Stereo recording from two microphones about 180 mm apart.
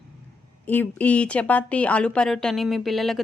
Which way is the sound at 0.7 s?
10° left (ahead or behind).